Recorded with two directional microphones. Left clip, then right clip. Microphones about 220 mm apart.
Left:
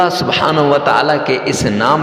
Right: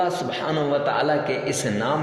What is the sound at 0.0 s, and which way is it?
A man's voice, 35° left (ahead or behind).